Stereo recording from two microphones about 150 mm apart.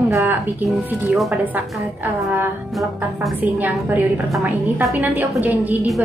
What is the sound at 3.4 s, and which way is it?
A woman's voice, 10° right (ahead or behind).